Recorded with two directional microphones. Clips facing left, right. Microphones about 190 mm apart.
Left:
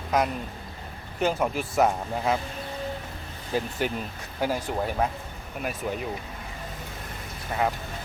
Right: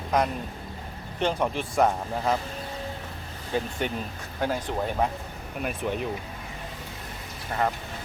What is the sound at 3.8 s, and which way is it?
Speech, 5° left (ahead or behind).